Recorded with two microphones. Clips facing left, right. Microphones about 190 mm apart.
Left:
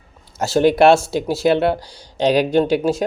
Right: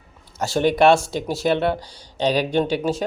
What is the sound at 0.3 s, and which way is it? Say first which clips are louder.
Speech: left 4 dB; 10° left (ahead or behind).